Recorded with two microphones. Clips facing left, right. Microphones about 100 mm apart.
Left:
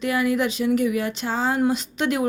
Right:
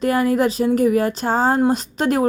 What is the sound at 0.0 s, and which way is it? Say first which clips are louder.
Speech: right 5 dB; 40° right (ahead or behind).